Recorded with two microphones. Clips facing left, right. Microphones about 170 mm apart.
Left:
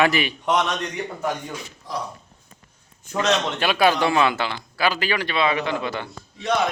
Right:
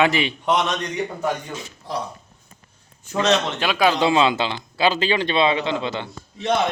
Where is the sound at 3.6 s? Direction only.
5° left (ahead or behind).